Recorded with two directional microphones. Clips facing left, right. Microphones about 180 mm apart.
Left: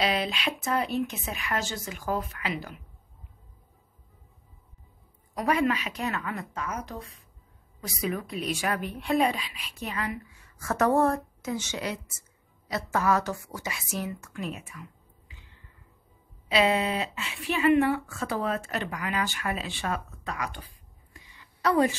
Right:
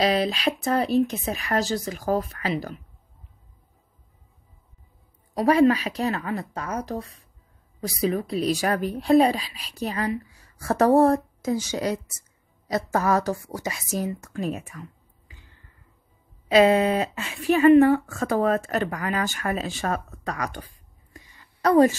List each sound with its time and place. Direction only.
0.0 s speech: 40° right (ahead or behind)
5.3 s speech: 35° right (ahead or behind)
16.4 s speech: 45° right (ahead or behind)
21.1 s a sound: 45° right (ahead or behind)